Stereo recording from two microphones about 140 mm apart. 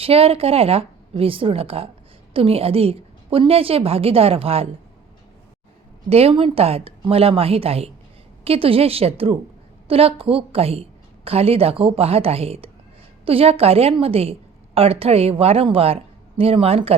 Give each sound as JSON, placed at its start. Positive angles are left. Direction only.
{"t": 0.0, "sound": "a woman's voice", "side_deg": -45}
{"t": 6.1, "sound": "a woman's voice", "side_deg": -45}